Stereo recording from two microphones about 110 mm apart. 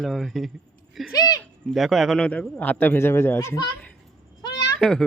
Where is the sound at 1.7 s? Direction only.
Centre (ahead or behind); by 3.6 s 20° left (ahead or behind).